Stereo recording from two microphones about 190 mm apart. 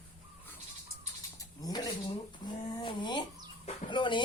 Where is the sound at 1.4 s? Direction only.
20° left (ahead or behind).